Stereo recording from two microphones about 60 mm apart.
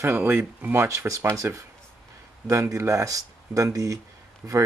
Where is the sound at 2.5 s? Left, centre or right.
Right.